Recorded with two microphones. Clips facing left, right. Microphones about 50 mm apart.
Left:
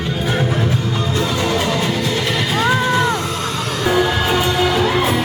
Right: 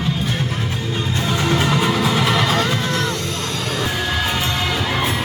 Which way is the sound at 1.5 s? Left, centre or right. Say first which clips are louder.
Even; centre.